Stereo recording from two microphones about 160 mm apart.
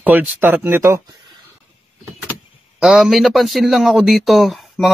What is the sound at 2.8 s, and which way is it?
Speech, centre (ahead or behind).